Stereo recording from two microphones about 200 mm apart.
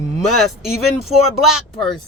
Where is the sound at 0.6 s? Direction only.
Centre (ahead or behind).